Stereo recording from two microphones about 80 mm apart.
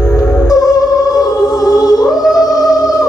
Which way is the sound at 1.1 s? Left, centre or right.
Left.